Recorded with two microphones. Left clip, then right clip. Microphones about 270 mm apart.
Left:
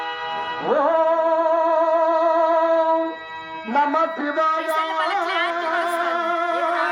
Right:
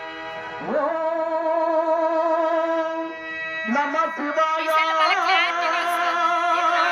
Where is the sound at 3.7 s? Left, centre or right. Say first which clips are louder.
Left 4 dB; centre.